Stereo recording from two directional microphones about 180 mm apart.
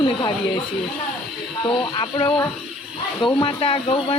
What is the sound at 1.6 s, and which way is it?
Speech, 25° left (ahead or behind).